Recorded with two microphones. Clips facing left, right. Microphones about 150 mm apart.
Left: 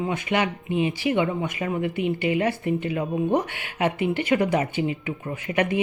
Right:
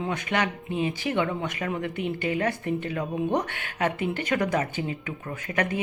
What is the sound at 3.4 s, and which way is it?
Speech, 55° right (ahead or behind).